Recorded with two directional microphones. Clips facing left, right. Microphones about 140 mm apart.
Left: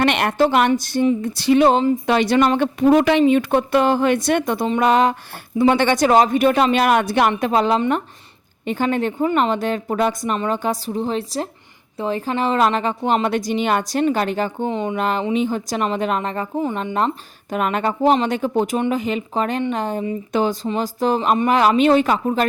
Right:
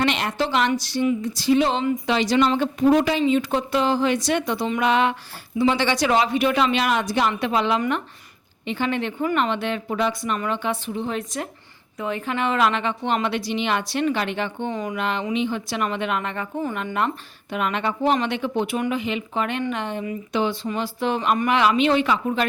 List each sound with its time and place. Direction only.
0.0 s speech: 60° left (ahead or behind)
1.2 s a woman's voice: 60° left (ahead or behind); by 5.1 s 40° left (ahead or behind)
5.5 s a woman's voice: 50° left (ahead or behind)
14.7 s speech: 25° left (ahead or behind)
14.9 s a woman's voice: 40° left (ahead or behind)
17.5 s a woman's voice: 45° left (ahead or behind)